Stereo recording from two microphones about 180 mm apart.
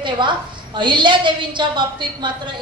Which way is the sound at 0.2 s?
25° right (ahead or behind).